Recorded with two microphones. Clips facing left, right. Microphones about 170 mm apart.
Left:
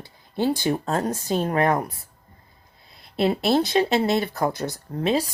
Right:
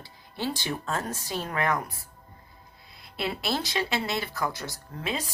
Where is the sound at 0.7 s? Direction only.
35° left (ahead or behind).